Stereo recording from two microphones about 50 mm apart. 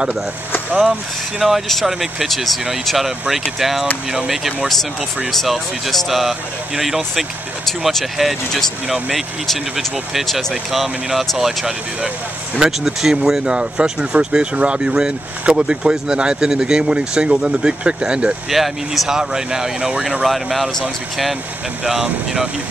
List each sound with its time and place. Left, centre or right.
1.4 s speech: centre
5.3 s speech: centre
18.5 s speech: centre
20.2 s speech: centre
21.8 s speech: centre